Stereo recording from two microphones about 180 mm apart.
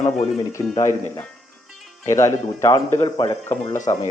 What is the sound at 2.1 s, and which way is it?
Speech, 15° left (ahead or behind).